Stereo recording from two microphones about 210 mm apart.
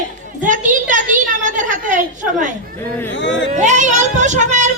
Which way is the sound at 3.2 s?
60° left (ahead or behind).